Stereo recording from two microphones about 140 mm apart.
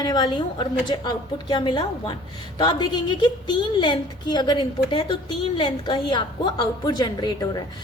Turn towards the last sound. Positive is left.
turn(degrees=30)  # may be behind; listen again after turning